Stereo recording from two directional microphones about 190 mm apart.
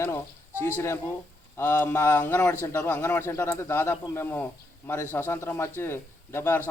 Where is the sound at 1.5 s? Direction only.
10° left (ahead or behind).